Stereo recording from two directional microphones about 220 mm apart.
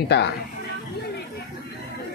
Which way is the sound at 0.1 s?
50° left (ahead or behind).